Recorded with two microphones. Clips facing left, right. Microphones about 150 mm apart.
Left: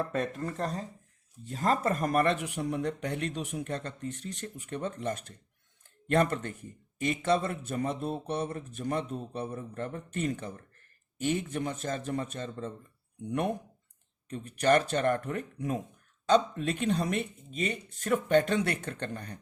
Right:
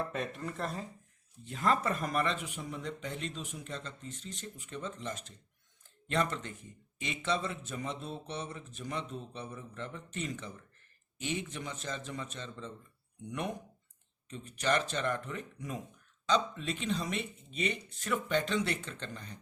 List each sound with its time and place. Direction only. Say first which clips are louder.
0.1 s a man's voice: left 5 dB; 40° left (ahead or behind); by 19.4 s 55° left (ahead or behind)